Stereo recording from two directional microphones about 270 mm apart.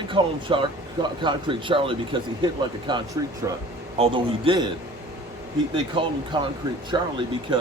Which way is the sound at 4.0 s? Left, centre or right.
Centre.